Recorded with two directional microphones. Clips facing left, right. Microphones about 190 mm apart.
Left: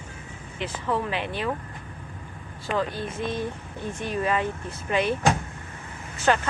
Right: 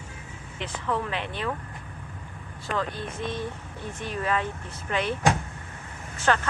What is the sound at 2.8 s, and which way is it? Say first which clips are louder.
Speech: left 3 dB; 10° left (ahead or behind).